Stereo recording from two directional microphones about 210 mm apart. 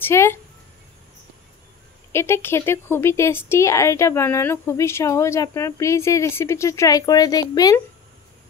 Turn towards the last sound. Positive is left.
turn(degrees=15)  # may be behind; listen again after turning